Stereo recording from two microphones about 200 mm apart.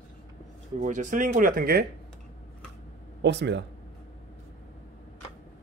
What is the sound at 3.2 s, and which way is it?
Speech, 60° right (ahead or behind).